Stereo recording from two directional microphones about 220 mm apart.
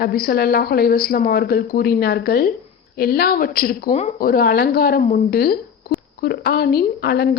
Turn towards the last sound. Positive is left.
turn(degrees=45)  # may be behind; listen again after turning